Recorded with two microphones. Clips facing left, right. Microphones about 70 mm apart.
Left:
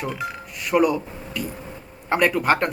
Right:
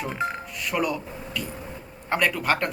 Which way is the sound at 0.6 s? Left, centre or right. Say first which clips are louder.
Left 7 dB; centre.